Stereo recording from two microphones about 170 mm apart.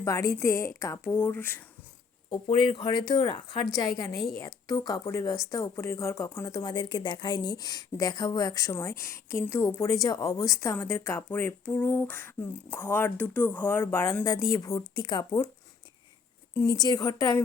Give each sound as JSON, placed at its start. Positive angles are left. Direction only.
{"t": 0.0, "sound": "speech", "side_deg": 20}
{"t": 2.3, "sound": "speech", "side_deg": 30}
{"t": 16.6, "sound": "speech", "side_deg": 20}